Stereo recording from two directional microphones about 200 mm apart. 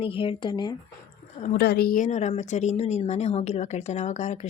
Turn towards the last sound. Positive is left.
turn(degrees=35)  # may be behind; listen again after turning